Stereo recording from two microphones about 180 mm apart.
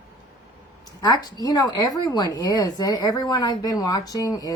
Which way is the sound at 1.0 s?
20° left (ahead or behind).